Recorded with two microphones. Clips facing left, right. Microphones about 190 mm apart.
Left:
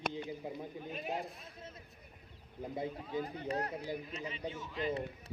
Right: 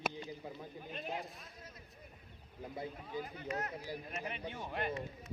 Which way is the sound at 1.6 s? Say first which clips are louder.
Left 4 dB; 25° left (ahead or behind).